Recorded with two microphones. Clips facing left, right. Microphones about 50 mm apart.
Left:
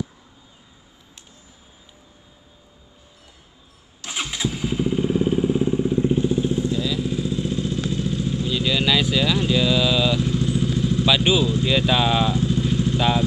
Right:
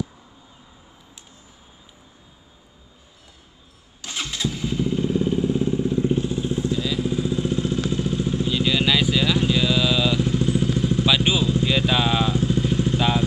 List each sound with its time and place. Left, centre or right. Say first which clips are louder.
4.0 s motorcycle: left 1 dB; centre
6.8 s vehicle: even; centre
10.4 s vehicle: right 1 dB; right
11.5 s vehicle: left 1 dB; centre
12.5 s vehicle: even; centre
12.9 s vehicle: left 2 dB; centre